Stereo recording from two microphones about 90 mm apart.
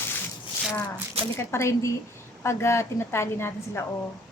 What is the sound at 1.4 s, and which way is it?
A woman's voice, 30° left (ahead or behind).